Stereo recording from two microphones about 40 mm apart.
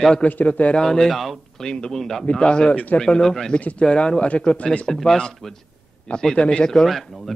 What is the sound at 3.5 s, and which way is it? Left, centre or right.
Speech, left.